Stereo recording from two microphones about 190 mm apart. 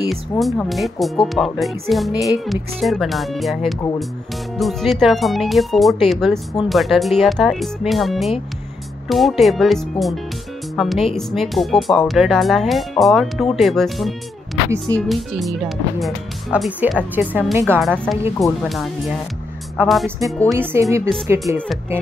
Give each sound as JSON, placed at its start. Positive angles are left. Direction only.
{"t": 0.1, "sound": "speech", "side_deg": 0}
{"t": 17.7, "sound": "speech", "side_deg": 0}
{"t": 20.5, "sound": "speech", "side_deg": -15}